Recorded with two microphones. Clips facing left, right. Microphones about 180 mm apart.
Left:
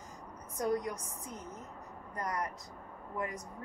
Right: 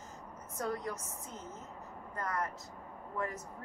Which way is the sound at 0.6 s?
15° left (ahead or behind).